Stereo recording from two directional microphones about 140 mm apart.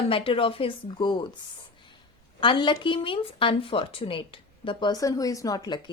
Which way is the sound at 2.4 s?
35° left (ahead or behind).